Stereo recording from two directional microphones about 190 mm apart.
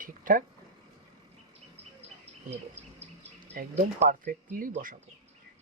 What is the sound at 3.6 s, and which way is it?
Speech, 45° right (ahead or behind).